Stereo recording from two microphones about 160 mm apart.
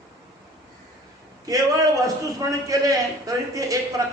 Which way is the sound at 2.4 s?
20° right (ahead or behind).